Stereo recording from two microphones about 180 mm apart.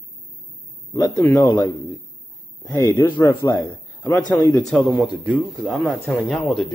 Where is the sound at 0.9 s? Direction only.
20° left (ahead or behind).